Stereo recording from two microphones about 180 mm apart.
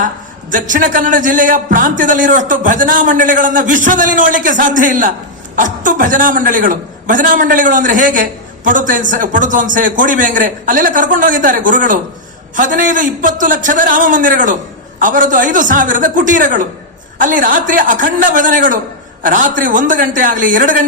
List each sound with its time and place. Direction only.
0.5 s a man's voice: 45° right (ahead or behind)